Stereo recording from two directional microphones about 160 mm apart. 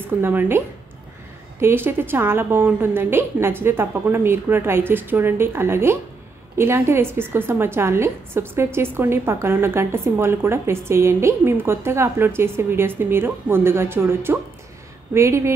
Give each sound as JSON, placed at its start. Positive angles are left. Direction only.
{"t": 0.0, "sound": "a woman's voice", "side_deg": -10}